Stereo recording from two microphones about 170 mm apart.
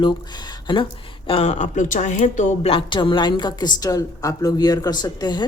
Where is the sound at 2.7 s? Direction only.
30° left (ahead or behind).